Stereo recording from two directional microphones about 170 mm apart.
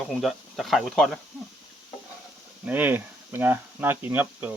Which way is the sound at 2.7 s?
10° right (ahead or behind).